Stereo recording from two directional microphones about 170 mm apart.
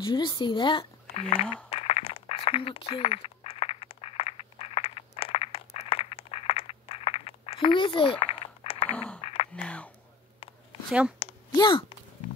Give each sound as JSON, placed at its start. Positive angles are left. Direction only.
{"t": 0.0, "sound": "speech", "side_deg": 25}
{"t": 1.7, "sound": "a sound", "side_deg": 35}
{"t": 8.9, "sound": "speech", "side_deg": 5}
{"t": 9.2, "sound": "a sound", "side_deg": 35}
{"t": 9.5, "sound": "speech", "side_deg": 5}
{"t": 10.9, "sound": "speech", "side_deg": -5}
{"t": 11.5, "sound": "speech", "side_deg": 25}